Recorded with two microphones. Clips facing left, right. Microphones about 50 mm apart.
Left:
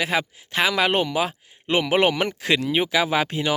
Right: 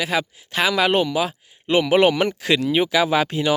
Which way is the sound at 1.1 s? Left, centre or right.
Left.